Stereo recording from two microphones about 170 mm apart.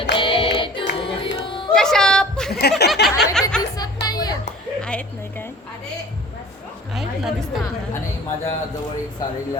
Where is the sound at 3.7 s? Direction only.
25° left (ahead or behind).